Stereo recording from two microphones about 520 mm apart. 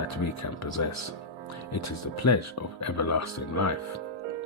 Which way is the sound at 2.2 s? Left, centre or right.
Left.